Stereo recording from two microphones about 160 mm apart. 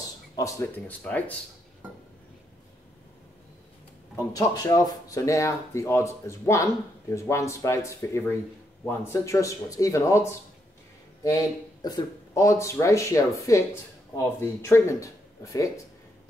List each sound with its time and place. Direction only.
0.4 s speech: 15° left (ahead or behind)
4.2 s speech: 20° left (ahead or behind)
11.8 s speech: 25° left (ahead or behind)